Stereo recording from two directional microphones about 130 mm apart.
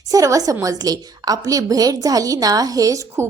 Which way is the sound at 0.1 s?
25° right (ahead or behind).